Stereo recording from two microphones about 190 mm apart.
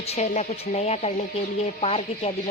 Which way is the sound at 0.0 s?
35° left (ahead or behind).